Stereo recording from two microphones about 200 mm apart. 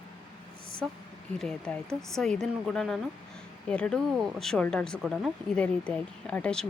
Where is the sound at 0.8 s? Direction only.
Centre (ahead or behind).